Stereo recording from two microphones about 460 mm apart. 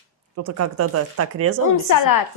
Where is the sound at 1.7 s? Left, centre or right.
Left.